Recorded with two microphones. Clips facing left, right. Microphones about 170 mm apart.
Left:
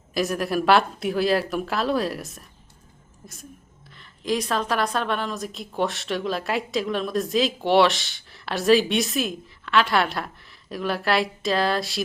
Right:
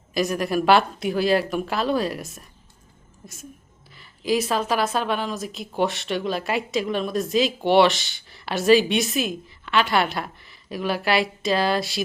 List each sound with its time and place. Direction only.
0.1 s a woman's voice: centre (ahead or behind)